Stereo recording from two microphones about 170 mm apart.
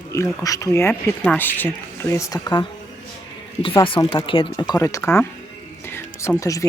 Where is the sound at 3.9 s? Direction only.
30° left (ahead or behind).